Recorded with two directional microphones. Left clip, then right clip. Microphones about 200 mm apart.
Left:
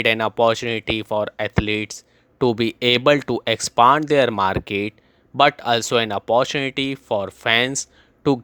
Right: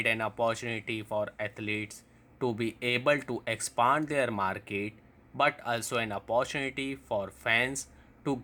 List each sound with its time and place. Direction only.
0.0 s speech: 40° left (ahead or behind)